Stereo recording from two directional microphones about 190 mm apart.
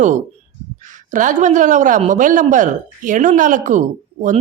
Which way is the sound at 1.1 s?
40° right (ahead or behind).